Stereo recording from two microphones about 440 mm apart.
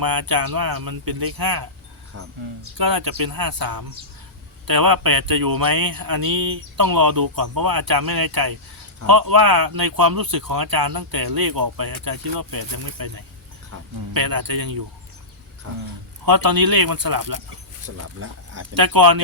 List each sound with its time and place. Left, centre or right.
0.0 s speech: right
2.1 s speech: right
2.7 s speech: right
14.1 s speech: right
16.2 s speech: right
17.9 s speech: right
18.7 s speech: right